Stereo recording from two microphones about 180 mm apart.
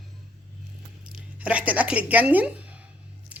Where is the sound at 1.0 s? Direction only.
5° right (ahead or behind).